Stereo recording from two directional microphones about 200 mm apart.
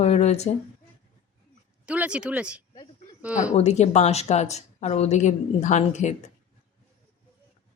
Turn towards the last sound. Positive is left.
turn(degrees=35)  # may be behind; listen again after turning